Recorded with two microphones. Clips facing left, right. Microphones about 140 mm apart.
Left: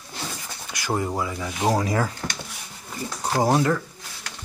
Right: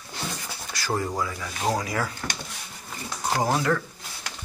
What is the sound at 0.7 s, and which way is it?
Speech, 20° left (ahead or behind).